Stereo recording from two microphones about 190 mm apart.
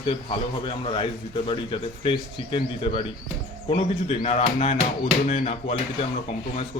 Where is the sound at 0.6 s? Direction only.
25° left (ahead or behind).